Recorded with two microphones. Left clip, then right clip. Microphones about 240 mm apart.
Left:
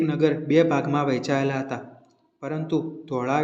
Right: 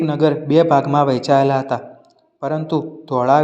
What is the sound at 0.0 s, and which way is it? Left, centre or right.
A man's voice, right.